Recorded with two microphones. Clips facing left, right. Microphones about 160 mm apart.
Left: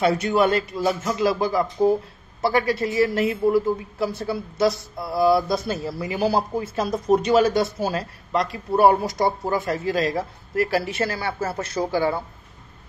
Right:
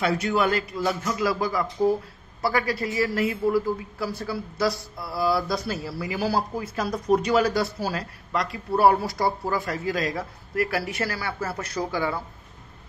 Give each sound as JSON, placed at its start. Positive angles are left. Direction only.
{"t": 0.0, "sound": "a woman's voice", "side_deg": 25}